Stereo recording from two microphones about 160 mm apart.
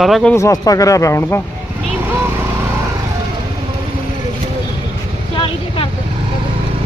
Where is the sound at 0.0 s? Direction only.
Centre (ahead or behind).